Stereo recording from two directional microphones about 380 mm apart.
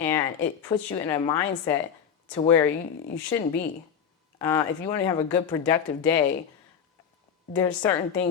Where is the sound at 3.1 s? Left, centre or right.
Centre.